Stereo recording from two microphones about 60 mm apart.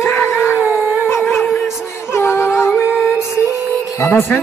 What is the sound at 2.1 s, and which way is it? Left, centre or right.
Music, left.